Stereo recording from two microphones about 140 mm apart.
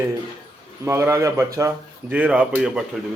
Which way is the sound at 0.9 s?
20° right (ahead or behind).